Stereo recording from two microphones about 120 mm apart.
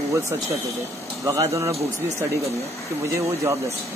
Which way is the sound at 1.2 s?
25° right (ahead or behind).